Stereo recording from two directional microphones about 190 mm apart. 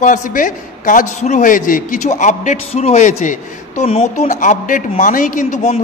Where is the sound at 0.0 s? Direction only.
45° left (ahead or behind).